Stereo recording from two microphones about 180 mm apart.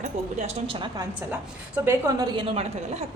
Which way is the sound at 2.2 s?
30° right (ahead or behind).